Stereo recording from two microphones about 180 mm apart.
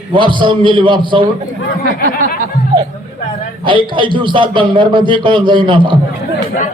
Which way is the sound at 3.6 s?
25° right (ahead or behind).